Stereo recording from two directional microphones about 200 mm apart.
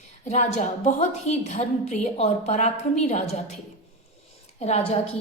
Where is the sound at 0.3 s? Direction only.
35° left (ahead or behind).